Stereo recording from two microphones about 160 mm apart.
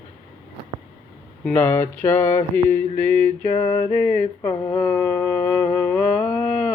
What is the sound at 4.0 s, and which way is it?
Music, 10° left (ahead or behind).